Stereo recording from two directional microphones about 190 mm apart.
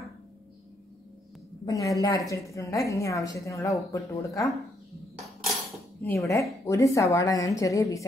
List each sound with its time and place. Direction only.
1.7 s a woman's voice: 15° left (ahead or behind)
6.0 s a woman's voice: 15° left (ahead or behind)